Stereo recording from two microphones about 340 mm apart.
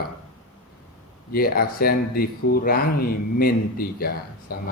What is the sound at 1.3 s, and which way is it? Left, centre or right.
Speech, left.